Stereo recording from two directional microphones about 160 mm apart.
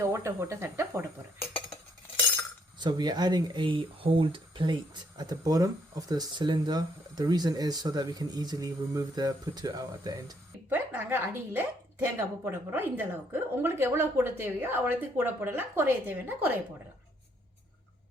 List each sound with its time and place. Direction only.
0.0 s speech: 20° right (ahead or behind)
2.7 s speech: 25° right (ahead or behind)
10.7 s speech: 10° right (ahead or behind)